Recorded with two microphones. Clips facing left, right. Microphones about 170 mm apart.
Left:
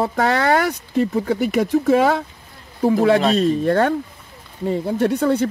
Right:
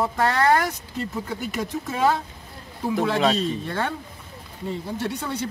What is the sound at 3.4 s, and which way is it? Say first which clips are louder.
Speech: left 10 dB; 50° left (ahead or behind).